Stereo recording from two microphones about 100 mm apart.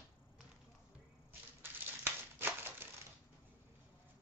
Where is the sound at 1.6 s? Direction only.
20° right (ahead or behind).